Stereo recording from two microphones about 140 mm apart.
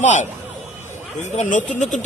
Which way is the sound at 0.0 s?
60° left (ahead or behind).